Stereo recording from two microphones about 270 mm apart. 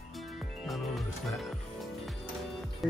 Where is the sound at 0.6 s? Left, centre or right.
Centre.